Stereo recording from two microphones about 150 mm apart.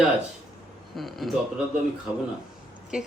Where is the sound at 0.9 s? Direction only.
Centre (ahead or behind).